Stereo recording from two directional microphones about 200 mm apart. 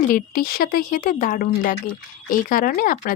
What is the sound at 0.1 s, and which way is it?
Speech, 45° left (ahead or behind).